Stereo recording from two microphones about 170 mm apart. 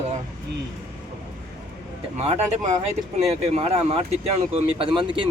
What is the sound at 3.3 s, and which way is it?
Speech, 35° right (ahead or behind).